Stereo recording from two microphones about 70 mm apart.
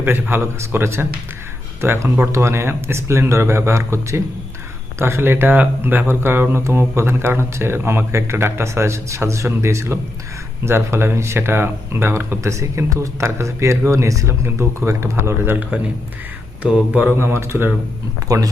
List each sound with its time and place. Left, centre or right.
0.0 s speech: right
14.4 s speech: right
16.6 s mantra: centre
17.1 s speech: right
18.3 s speech: right